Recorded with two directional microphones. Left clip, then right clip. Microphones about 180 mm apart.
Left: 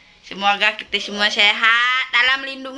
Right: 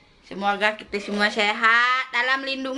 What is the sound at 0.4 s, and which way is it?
Speech, 15° right (ahead or behind).